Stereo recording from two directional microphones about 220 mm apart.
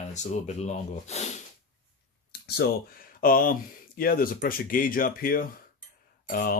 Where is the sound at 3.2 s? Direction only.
40° left (ahead or behind).